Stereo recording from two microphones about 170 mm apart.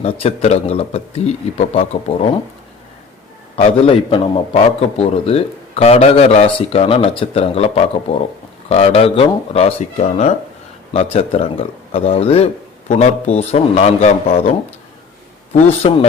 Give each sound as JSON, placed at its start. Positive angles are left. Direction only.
{"t": 0.0, "sound": "a man's voice", "side_deg": 35}
{"t": 3.5, "sound": "a man's voice", "side_deg": 35}
{"t": 15.5, "sound": "a man's voice", "side_deg": 35}